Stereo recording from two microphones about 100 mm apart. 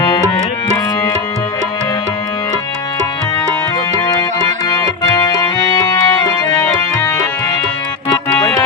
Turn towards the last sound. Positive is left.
turn(degrees=30)  # may be behind; listen again after turning